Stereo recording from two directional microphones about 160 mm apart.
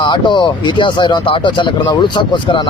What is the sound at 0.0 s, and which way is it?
Speech, 30° left (ahead or behind).